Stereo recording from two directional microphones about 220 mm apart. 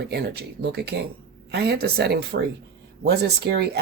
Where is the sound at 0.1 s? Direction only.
50° right (ahead or behind).